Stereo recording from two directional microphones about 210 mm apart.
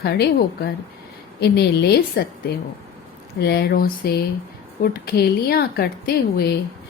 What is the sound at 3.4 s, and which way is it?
Speech, 50° left (ahead or behind).